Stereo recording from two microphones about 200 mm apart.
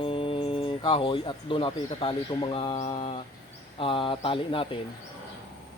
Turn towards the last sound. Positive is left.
turn(degrees=25)  # may be behind; listen again after turning